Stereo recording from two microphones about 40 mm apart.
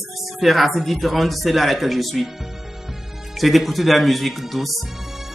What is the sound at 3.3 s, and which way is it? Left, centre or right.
Speech, centre.